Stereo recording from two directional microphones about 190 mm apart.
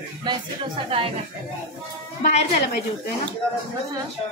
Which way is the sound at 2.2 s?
40° left (ahead or behind).